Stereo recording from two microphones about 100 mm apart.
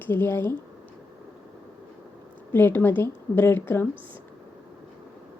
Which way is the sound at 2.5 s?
20° left (ahead or behind).